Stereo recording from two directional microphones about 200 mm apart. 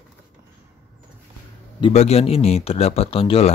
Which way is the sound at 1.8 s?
30° left (ahead or behind).